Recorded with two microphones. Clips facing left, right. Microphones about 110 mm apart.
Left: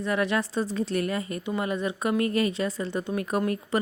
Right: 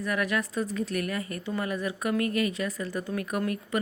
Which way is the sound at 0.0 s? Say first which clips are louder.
Left 3 dB; 25° left (ahead or behind).